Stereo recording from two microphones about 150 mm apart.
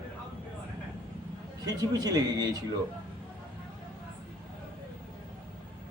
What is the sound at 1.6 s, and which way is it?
Speech, 25° right (ahead or behind).